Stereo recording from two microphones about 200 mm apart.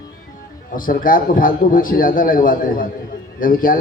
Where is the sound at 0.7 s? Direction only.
45° left (ahead or behind).